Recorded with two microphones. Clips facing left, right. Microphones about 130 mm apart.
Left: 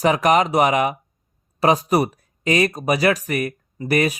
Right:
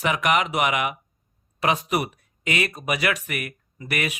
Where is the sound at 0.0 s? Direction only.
35° left (ahead or behind).